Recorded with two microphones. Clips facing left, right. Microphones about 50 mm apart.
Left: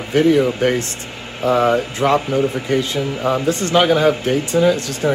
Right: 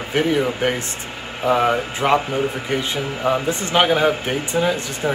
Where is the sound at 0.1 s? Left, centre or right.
Centre.